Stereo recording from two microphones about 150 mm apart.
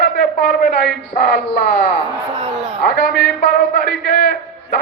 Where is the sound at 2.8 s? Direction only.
80° left.